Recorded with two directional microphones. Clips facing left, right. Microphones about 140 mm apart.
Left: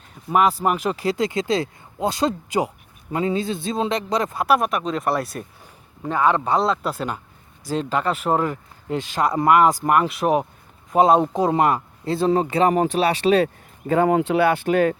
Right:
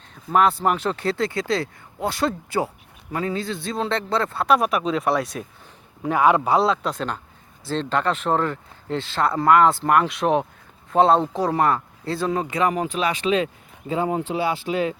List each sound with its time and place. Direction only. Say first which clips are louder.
0.1 s a sound: even; 10° left (ahead or behind)
0.6 s speech: left 1 dB; 10° left (ahead or behind)
4.5 s speech: right 1 dB; centre (ahead or behind)
6.0 s a man's voice: right 2 dB; 10° right (ahead or behind); by 13.5 s 35° left (ahead or behind)
13.8 s speech: left 6 dB; 55° left (ahead or behind)